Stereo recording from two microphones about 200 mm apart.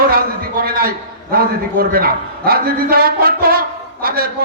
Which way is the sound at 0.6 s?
50° right (ahead or behind).